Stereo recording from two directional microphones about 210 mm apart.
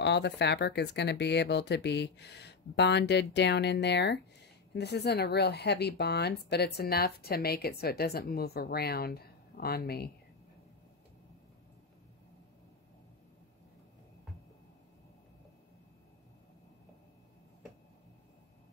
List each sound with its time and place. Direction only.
0.0 s a woman's voice: 55° left (ahead or behind)